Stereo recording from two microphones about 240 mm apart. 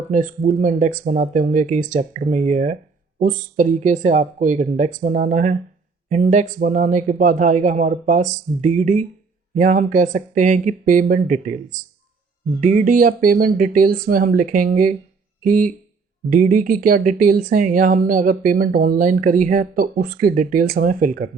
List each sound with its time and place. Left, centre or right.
0.1 s speech: right